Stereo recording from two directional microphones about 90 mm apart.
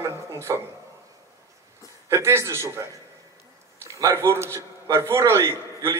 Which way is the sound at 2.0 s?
30° right (ahead or behind).